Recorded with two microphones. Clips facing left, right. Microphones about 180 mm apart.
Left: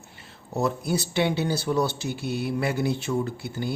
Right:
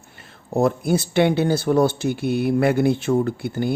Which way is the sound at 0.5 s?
50° right (ahead or behind).